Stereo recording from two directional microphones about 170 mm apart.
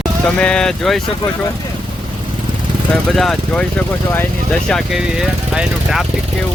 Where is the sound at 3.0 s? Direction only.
Centre (ahead or behind).